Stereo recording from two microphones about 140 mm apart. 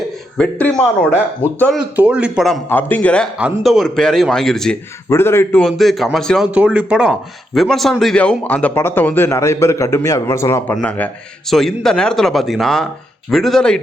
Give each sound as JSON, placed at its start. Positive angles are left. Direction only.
{"t": 0.3, "sound": "a man's voice", "side_deg": 5}
{"t": 1.7, "sound": "a man's voice", "side_deg": -10}
{"t": 2.6, "sound": "a man's voice", "side_deg": 15}
{"t": 3.3, "sound": "speech", "side_deg": -5}
{"t": 5.0, "sound": "a man's voice", "side_deg": 15}
{"t": 5.6, "sound": "speech", "side_deg": 0}
{"t": 6.5, "sound": "a man's voice", "side_deg": -10}